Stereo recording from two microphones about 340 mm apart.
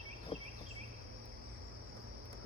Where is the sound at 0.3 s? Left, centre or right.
Centre.